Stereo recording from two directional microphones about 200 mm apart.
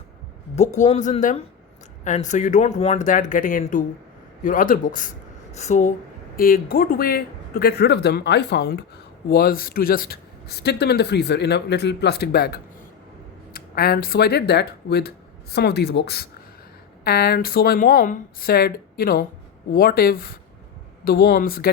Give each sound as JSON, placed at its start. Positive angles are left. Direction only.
{"t": 0.5, "sound": "speech", "side_deg": 35}
{"t": 6.3, "sound": "speech", "side_deg": 45}